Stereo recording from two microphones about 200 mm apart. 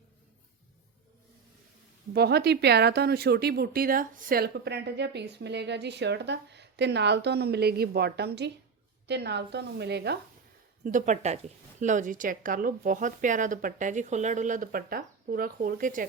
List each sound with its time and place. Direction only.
2.1 s speech: 55° right (ahead or behind)
10.8 s a woman's voice: 40° right (ahead or behind)